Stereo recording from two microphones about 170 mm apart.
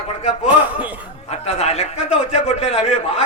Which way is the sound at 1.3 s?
40° left (ahead or behind).